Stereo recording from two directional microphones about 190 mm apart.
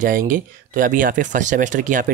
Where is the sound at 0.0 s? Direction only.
45° right (ahead or behind).